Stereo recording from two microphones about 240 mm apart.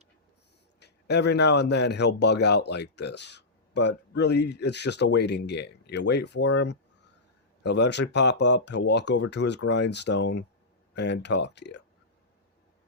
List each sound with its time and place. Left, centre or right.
0.8 s a man's voice: left